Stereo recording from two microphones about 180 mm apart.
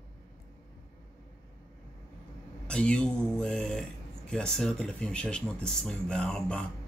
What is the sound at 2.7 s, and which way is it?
Speech, 5° left (ahead or behind).